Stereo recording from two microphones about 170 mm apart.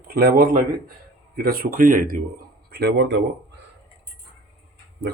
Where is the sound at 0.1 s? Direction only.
60° right (ahead or behind).